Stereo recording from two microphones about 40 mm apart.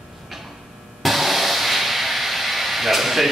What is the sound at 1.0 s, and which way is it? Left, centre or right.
Hiss, centre.